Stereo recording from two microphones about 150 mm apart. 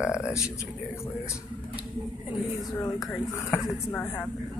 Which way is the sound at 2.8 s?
20° left (ahead or behind).